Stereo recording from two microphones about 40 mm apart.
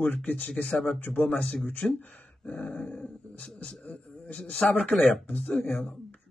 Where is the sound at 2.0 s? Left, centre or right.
Left.